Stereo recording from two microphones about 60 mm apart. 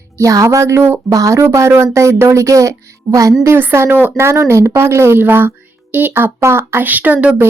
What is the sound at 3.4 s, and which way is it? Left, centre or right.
Speech, right.